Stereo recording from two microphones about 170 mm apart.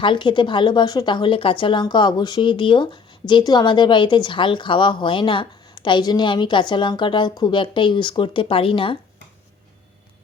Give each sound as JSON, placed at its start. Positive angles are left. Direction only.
{"t": 0.0, "sound": "speech", "side_deg": 30}